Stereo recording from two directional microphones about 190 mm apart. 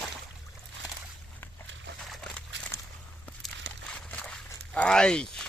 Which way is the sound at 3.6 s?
70° right (ahead or behind).